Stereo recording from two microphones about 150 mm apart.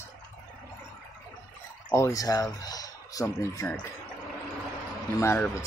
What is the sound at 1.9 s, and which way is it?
Speech, 20° left (ahead or behind).